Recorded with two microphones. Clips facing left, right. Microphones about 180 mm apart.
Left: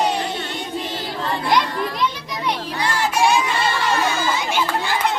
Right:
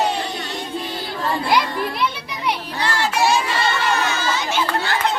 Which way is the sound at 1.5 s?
10° right (ahead or behind).